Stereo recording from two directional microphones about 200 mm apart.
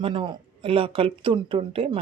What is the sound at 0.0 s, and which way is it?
Speech, 25° right (ahead or behind).